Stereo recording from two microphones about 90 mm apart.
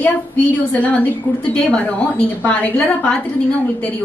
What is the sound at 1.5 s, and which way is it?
A woman's voice, 15° left (ahead or behind).